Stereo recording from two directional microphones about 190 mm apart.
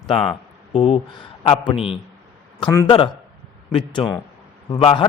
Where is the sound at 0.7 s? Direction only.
30° left (ahead or behind).